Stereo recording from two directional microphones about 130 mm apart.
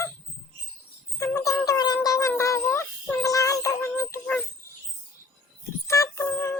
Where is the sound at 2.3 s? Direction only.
20° left (ahead or behind).